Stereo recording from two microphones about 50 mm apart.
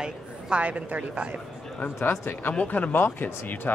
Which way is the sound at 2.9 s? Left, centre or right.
Left.